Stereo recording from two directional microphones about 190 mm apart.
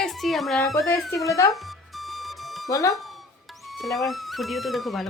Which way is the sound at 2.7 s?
15° left (ahead or behind).